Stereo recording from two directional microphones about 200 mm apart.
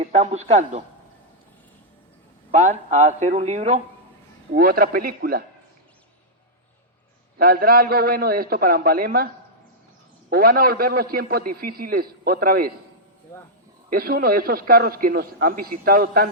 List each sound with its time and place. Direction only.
0.0 s speech: 35° right (ahead or behind)
2.5 s speech: 35° right (ahead or behind)
4.5 s a man's voice: 45° right (ahead or behind)
7.3 s a man's voice: 50° right (ahead or behind)
13.9 s a man's voice: 50° right (ahead or behind)